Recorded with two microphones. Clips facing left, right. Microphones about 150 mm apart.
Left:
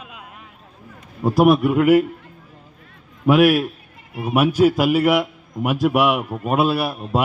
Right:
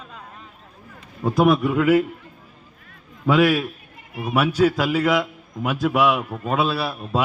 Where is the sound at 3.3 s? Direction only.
10° left (ahead or behind).